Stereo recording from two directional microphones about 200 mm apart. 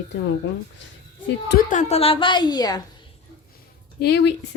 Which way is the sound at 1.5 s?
40° left (ahead or behind).